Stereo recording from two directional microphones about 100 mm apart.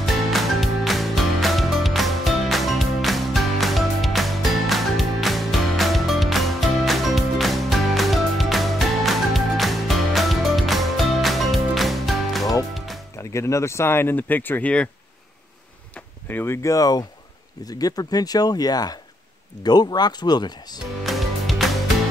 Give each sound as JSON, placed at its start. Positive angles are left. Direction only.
{"t": 0.0, "sound": "music", "side_deg": 0}
{"t": 13.3, "sound": "speech", "side_deg": 30}
{"t": 16.3, "sound": "speech", "side_deg": 20}
{"t": 16.6, "sound": "speech", "side_deg": 35}
{"t": 21.0, "sound": "music", "side_deg": 0}